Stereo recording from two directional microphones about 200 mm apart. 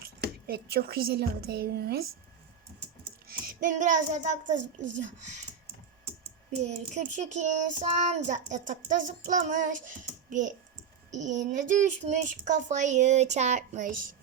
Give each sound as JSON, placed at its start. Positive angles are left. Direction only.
{"t": 0.0, "sound": "speech", "side_deg": -50}
{"t": 3.2, "sound": "a child's voice", "side_deg": -45}
{"t": 6.7, "sound": "child singing", "side_deg": -35}